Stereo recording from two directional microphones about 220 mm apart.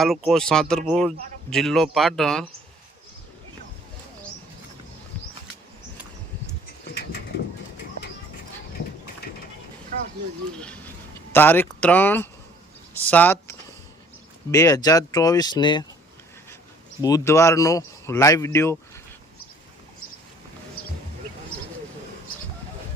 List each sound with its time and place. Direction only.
0.0 s speech: centre (ahead or behind)
6.8 s a sound: 45° left (ahead or behind)
11.3 s speech: 10° left (ahead or behind)
17.0 s speech: 15° left (ahead or behind)